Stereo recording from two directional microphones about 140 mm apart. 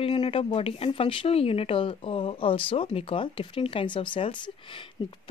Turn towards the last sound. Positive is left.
turn(degrees=35)  # may be behind; listen again after turning